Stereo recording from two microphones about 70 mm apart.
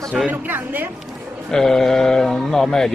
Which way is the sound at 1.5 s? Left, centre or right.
Centre.